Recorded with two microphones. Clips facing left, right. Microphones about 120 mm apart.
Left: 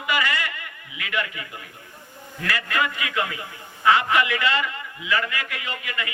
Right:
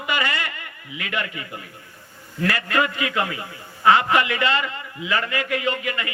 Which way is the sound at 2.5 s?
35° right (ahead or behind).